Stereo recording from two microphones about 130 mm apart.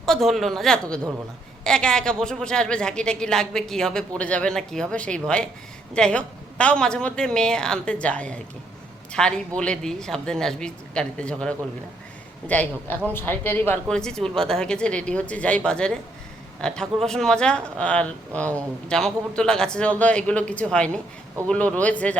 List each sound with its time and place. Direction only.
0.0 s a woman's voice: centre (ahead or behind)
13.9 s a man's voice: 5° left (ahead or behind)